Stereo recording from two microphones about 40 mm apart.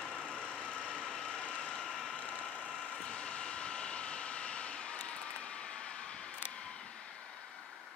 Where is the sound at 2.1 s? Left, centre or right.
Left.